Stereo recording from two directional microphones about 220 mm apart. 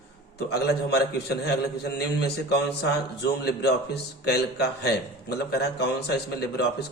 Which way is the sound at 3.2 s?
50° left (ahead or behind).